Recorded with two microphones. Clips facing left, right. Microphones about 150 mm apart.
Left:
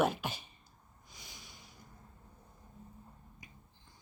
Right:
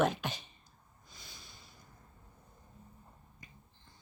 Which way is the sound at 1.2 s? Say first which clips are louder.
Left 1 dB; 15° left (ahead or behind).